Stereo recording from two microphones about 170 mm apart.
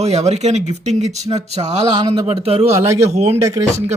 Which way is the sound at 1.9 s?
30° right (ahead or behind).